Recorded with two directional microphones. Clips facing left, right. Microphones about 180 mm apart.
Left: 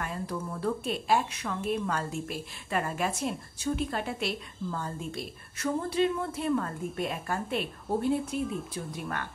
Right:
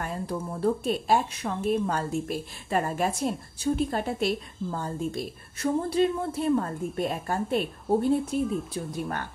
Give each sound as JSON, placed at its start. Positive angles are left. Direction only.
{"t": 0.0, "sound": "a woman's voice", "side_deg": -30}
{"t": 8.4, "sound": "a woman's voice", "side_deg": 0}